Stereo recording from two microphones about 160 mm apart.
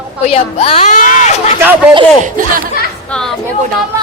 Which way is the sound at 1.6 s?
10° right (ahead or behind).